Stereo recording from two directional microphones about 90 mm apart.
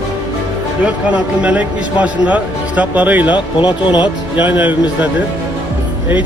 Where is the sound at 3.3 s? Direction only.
60° left (ahead or behind).